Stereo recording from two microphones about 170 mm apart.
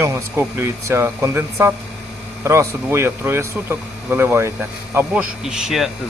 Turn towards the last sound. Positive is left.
turn(degrees=0)  # may be behind; listen again after turning